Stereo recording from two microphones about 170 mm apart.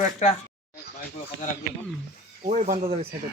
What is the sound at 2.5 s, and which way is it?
Speech, 50° right (ahead or behind).